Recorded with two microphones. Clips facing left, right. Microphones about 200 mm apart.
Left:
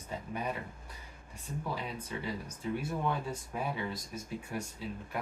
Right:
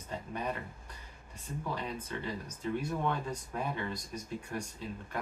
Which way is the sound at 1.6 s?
10° left (ahead or behind).